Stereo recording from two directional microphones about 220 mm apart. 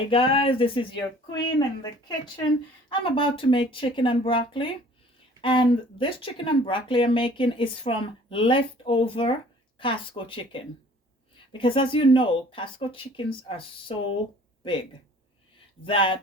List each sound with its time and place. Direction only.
0.1 s speech: 25° left (ahead or behind)
15.9 s speech: 25° left (ahead or behind)